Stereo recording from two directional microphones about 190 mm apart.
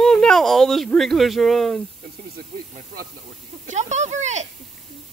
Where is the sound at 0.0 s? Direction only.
5° left (ahead or behind).